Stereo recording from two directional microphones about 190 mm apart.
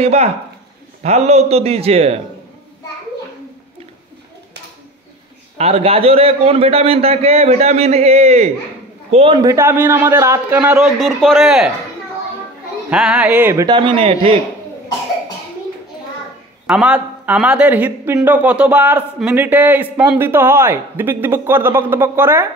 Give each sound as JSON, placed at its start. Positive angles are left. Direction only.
{"t": 0.0, "sound": "a man's voice", "side_deg": -35}
{"t": 5.6, "sound": "a man's voice", "side_deg": -30}
{"t": 12.9, "sound": "speech", "side_deg": -5}
{"t": 13.7, "sound": "speech", "side_deg": -25}
{"t": 16.6, "sound": "speech", "side_deg": -5}